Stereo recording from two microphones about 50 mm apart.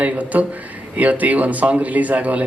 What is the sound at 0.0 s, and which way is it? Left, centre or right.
A man's voice, right.